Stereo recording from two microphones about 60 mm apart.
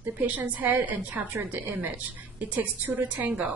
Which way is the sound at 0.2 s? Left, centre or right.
Right.